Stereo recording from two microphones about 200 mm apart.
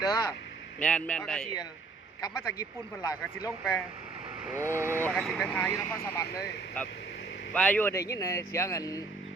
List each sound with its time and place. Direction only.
0.0 s speech: 20° left (ahead or behind)
0.8 s a man's voice: 5° left (ahead or behind)
2.2 s speech: 20° left (ahead or behind)
4.4 s speech: 10° right (ahead or behind)
5.0 s a man's voice: centre (ahead or behind)
5.6 s speech: 10° left (ahead or behind)